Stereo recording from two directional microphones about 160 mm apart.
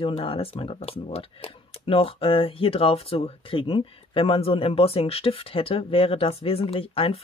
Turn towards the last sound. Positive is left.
turn(degrees=35)  # may be behind; listen again after turning